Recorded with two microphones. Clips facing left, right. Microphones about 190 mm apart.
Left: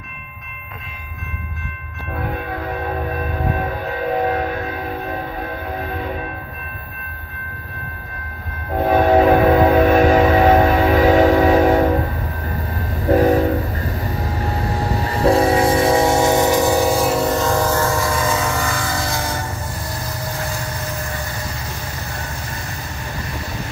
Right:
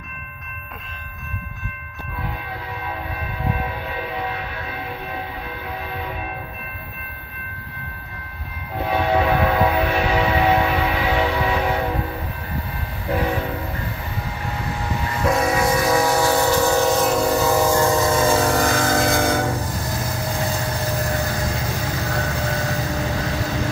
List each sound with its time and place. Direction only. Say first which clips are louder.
2.2 s a sound: left 7 dB; 50° left (ahead or behind)
8.7 s train: left 6 dB; 50° left (ahead or behind)
13.0 s train: left 9 dB; 40° left (ahead or behind); by 17.6 s centre (ahead or behind)
17.6 s train: right 1 dB; 15° right (ahead or behind); by 19.4 s 55° right (ahead or behind)
22.1 s vehicle: right 6 dB; 90° right